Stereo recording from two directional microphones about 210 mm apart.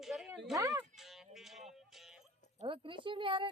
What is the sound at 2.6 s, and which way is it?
Speech, 25° right (ahead or behind).